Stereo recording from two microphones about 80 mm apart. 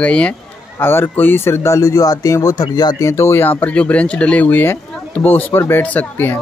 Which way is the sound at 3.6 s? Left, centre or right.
Centre.